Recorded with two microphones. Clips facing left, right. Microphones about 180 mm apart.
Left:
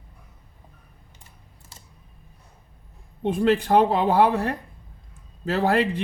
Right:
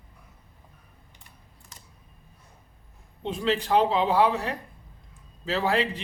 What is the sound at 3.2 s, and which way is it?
A man's voice, 55° left (ahead or behind).